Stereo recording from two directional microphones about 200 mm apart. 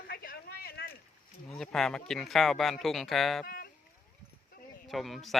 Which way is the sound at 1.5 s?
5° left (ahead or behind).